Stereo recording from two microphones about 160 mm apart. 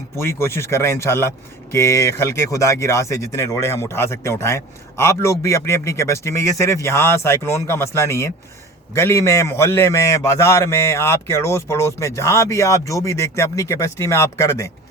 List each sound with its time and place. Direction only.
0.2 s speech: 15° left (ahead or behind)